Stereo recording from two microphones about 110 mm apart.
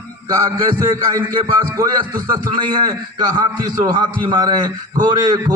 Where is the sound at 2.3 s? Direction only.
40° right (ahead or behind).